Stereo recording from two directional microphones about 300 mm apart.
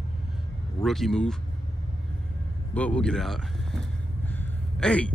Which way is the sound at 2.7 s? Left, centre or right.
Centre.